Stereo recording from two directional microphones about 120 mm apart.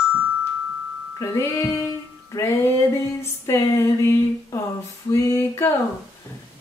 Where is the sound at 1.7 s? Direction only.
25° left (ahead or behind).